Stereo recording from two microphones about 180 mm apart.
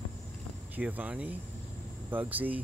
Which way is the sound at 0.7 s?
10° right (ahead or behind).